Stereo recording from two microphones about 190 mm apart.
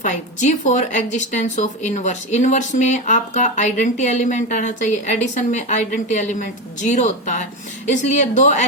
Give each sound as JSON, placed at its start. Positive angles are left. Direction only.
{"t": 0.0, "sound": "speech", "side_deg": 40}